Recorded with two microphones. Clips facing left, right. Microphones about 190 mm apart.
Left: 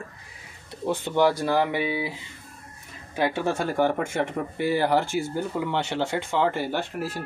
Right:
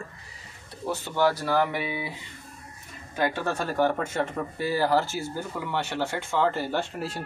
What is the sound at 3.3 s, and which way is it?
Speech, 15° left (ahead or behind).